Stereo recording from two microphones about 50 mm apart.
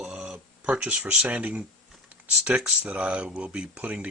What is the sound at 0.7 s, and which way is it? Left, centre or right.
Speech, right.